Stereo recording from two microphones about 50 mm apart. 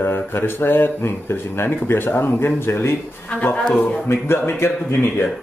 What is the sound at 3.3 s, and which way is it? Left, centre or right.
Speech, left.